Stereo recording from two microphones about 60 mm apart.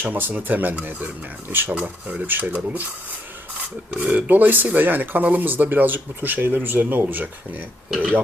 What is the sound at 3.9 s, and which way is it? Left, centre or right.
A man's voice, right.